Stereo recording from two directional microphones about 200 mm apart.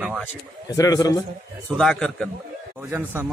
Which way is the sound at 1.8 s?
Centre (ahead or behind).